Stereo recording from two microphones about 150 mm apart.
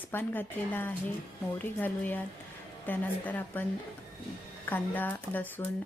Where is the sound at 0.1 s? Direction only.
15° left (ahead or behind).